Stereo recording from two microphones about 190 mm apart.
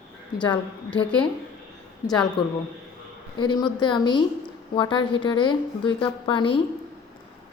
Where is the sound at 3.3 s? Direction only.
25° left (ahead or behind).